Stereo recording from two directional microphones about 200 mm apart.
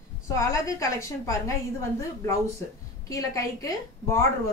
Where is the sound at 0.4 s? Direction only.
15° left (ahead or behind).